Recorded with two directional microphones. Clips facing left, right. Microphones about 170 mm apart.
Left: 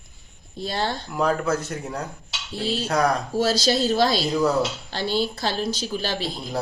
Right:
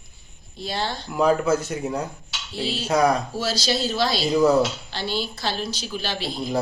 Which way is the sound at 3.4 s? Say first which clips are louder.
Left 4 dB; 50° left (ahead or behind).